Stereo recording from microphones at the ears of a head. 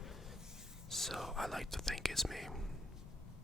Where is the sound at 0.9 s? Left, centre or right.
Centre.